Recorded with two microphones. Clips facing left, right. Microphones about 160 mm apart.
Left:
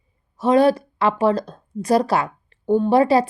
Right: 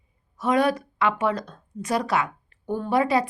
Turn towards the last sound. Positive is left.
turn(degrees=30)  # may be behind; listen again after turning